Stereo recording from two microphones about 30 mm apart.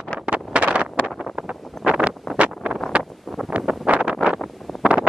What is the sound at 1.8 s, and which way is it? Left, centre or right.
Wind noise, centre.